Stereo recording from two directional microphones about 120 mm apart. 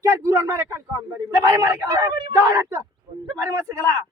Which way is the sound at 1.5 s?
30° right (ahead or behind).